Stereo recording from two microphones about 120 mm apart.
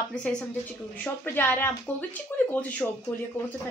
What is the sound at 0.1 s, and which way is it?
A woman's voice, 5° left (ahead or behind).